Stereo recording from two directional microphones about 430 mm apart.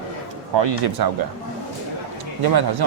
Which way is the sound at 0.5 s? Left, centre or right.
Right.